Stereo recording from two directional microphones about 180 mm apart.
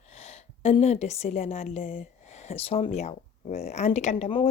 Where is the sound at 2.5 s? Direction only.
35° left (ahead or behind).